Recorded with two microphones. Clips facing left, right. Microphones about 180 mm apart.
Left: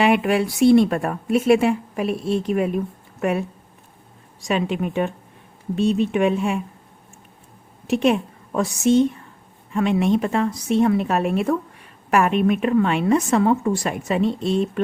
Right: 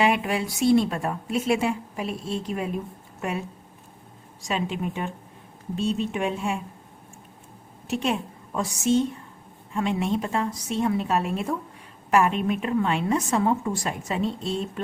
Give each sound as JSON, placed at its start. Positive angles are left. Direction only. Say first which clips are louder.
{"t": 0.0, "sound": "speech", "louder": "left 5 dB", "side_deg": 65}
{"t": 4.4, "sound": "speech", "louder": "left 5 dB", "side_deg": 65}
{"t": 7.9, "sound": "a woman's voice", "louder": "left 8 dB", "side_deg": 65}